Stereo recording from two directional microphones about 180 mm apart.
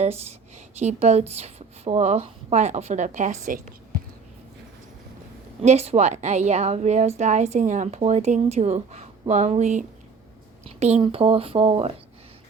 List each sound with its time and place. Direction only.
0.0 s a woman's voice: 35° right (ahead or behind)
5.6 s a woman's voice: 35° right (ahead or behind)